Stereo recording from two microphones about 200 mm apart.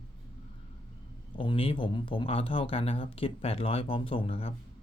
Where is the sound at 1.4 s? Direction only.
25° left (ahead or behind).